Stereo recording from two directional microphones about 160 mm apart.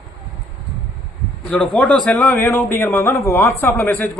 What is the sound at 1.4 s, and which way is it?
A man's voice, 5° left (ahead or behind).